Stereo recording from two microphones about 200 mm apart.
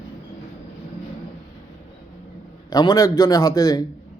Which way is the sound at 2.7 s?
15° left (ahead or behind).